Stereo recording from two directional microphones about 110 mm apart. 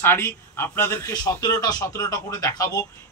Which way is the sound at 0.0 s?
20° left (ahead or behind).